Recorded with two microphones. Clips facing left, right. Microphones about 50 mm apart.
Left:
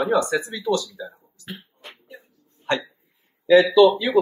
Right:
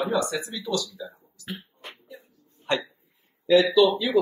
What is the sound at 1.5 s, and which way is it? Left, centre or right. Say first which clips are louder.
Beatboxing: right 1 dB; centre.